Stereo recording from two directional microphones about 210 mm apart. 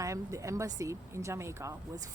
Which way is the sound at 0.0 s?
15° right (ahead or behind).